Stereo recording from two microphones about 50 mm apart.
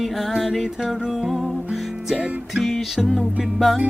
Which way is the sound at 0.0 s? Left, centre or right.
Centre.